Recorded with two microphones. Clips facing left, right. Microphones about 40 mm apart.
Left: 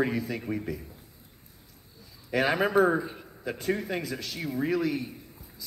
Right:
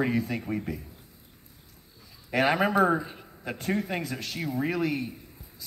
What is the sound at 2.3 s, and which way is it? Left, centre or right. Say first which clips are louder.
Speech: right 1 dB; centre.